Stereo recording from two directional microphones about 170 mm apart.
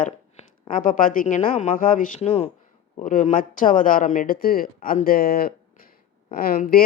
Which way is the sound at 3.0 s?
50° left (ahead or behind).